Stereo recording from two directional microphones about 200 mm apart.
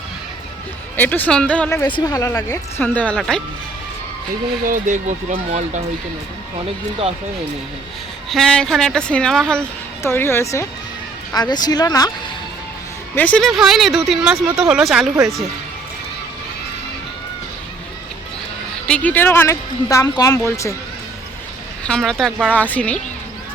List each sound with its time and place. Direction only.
0.9 s speech: 10° left (ahead or behind)
2.0 s speech: 20° left (ahead or behind); by 3.4 s centre (ahead or behind)
4.6 s speech: 40° right (ahead or behind)
8.3 s speech: 5° left (ahead or behind); by 12.1 s 20° left (ahead or behind)
13.1 s speech: 5° left (ahead or behind)
18.9 s speech: 5° left (ahead or behind)
21.8 s speech: 5° left (ahead or behind)